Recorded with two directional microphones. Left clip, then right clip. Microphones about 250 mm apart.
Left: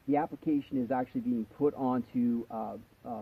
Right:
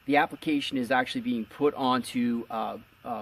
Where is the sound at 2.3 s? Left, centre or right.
Right.